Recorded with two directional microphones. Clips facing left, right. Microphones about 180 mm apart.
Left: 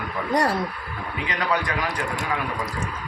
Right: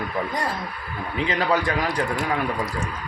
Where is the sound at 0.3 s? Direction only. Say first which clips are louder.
Left 6 dB; 80° left.